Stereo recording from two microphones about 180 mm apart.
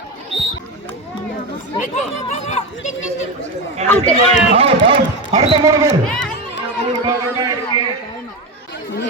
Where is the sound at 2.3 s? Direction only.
40° left (ahead or behind).